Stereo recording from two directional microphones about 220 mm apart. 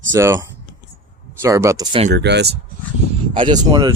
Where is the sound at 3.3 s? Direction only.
20° right (ahead or behind).